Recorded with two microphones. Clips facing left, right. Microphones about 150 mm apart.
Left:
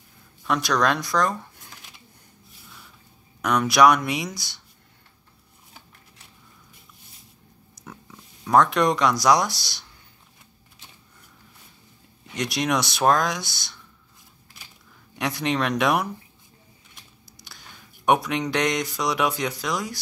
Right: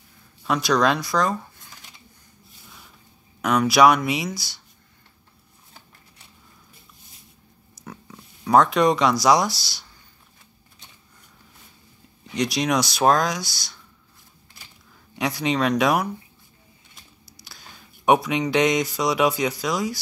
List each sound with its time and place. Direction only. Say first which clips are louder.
0.5 s speech: right 2 dB; centre (ahead or behind)
3.4 s speech: right 1 dB; 5° right (ahead or behind)
7.8 s a sound: right 3 dB; centre (ahead or behind)
8.7 s speech: right 2 dB; centre (ahead or behind)
9.5 s speech: right 4 dB; 20° left (ahead or behind)
12.4 s speech: right 2 dB; centre (ahead or behind)
15.1 s speech: right 2 dB; centre (ahead or behind)
17.5 s speech: right 1 dB; centre (ahead or behind)